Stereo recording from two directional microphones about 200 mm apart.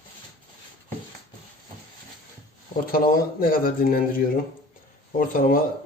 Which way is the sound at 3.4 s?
45° left (ahead or behind).